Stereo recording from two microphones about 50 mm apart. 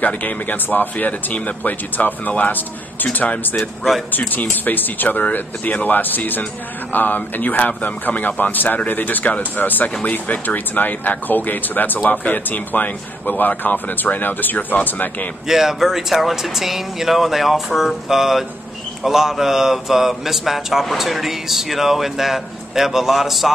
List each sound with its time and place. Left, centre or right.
0.0 s speech: left
15.4 s speech: centre